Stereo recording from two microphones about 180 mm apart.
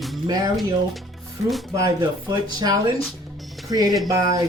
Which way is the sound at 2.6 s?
25° right (ahead or behind).